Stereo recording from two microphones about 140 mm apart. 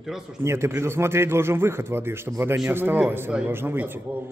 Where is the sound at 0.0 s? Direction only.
5° right (ahead or behind).